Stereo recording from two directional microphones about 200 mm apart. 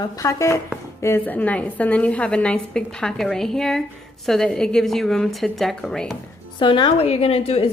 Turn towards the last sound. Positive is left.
turn(degrees=30)  # may be behind; listen again after turning